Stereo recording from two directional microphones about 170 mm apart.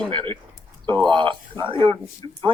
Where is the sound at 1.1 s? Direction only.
30° right (ahead or behind).